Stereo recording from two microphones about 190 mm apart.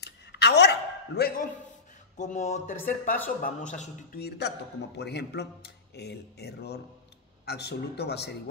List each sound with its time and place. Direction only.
0.0 s a sound: 60° left (ahead or behind)
2.1 s speech: 40° left (ahead or behind)
4.2 s a man's voice: 60° left (ahead or behind)